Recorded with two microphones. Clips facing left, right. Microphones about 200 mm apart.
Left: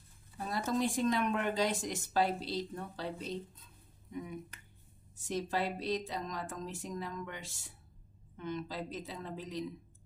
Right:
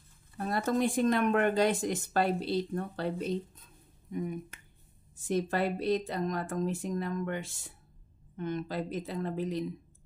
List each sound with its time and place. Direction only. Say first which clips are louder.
0.4 s speech: right 4 dB; 55° right (ahead or behind)